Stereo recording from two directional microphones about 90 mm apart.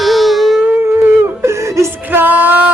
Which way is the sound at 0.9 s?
25° right (ahead or behind).